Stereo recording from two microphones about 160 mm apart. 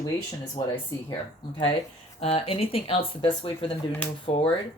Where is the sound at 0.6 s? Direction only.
30° left (ahead or behind).